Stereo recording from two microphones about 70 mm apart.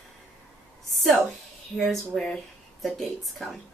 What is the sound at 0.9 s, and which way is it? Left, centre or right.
A woman's voice, centre.